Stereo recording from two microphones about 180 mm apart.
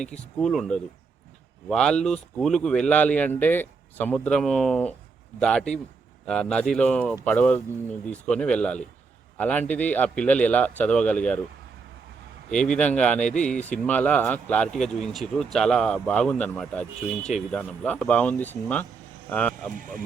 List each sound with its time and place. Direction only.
0.3 s speech: centre (ahead or behind)
12.5 s speech: 5° left (ahead or behind)
19.7 s speech: 50° right (ahead or behind)